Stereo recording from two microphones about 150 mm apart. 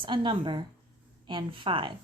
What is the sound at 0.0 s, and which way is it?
Speech, 35° right (ahead or behind).